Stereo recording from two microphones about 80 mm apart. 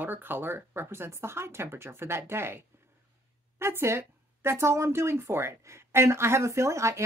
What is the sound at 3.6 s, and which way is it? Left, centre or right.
A woman's voice, right.